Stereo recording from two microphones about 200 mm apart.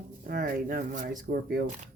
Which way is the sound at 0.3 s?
45° right (ahead or behind).